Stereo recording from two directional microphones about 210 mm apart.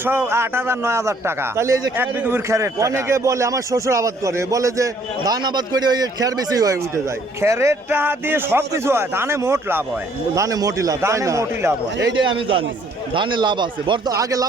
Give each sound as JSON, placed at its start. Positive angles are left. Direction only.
{"t": 0.0, "sound": "a man's voice", "side_deg": -10}